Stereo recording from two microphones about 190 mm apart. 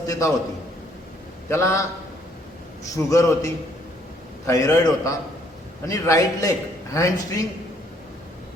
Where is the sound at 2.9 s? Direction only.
15° left (ahead or behind).